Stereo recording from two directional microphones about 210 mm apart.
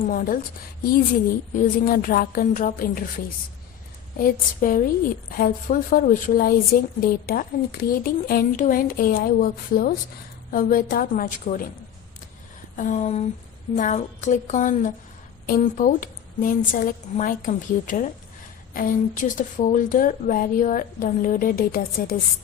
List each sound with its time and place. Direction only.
0.0 s a woman's voice: 40° left (ahead or behind)
1.5 s a woman's voice: 45° left (ahead or behind)
4.2 s a woman's voice: 40° left (ahead or behind)
12.7 s a woman's voice: 35° left (ahead or behind)